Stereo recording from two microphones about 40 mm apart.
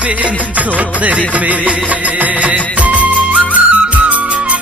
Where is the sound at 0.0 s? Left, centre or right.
Right.